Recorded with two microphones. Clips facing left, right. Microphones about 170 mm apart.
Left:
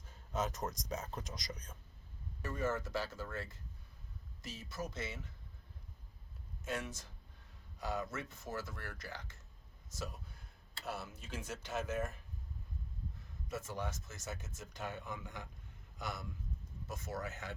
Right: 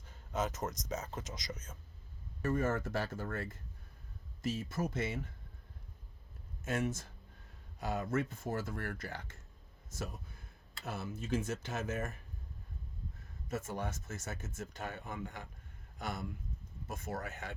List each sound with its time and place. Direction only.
0.0 s speech: centre (ahead or behind)
2.4 s speech: 50° right (ahead or behind)
6.7 s speech: 50° right (ahead or behind)
13.7 s speech: 55° right (ahead or behind)